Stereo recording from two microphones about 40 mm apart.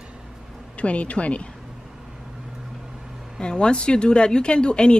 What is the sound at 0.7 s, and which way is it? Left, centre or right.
Speech, left.